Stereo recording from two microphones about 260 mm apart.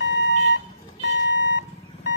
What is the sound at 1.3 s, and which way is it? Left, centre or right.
Reversing beeps, left.